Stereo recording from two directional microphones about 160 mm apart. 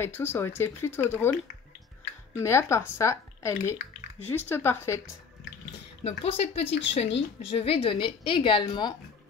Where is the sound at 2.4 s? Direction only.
15° left (ahead or behind).